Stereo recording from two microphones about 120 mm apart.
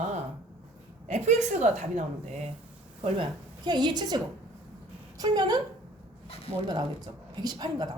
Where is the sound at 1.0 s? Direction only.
75° right (ahead or behind).